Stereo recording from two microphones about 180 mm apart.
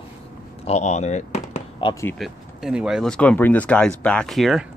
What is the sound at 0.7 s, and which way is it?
Speech, 40° left (ahead or behind).